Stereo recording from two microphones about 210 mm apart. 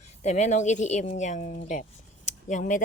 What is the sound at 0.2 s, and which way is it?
Speech, 35° left (ahead or behind).